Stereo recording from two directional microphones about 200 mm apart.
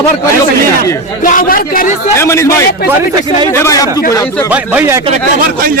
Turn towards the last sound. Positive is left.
turn(degrees=-10)  # may be behind; listen again after turning